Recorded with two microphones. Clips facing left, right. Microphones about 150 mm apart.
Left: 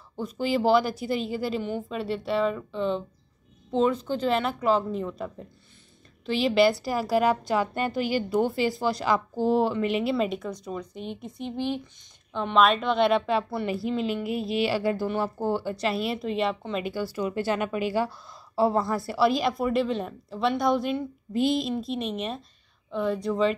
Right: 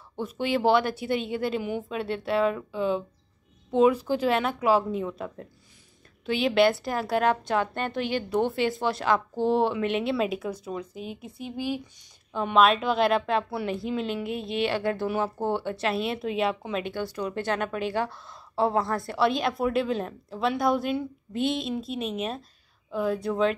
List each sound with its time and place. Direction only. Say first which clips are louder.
0.2 s a woman's voice: even; centre (ahead or behind)